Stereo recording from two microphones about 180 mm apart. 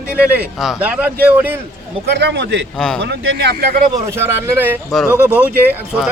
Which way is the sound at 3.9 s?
15° right (ahead or behind).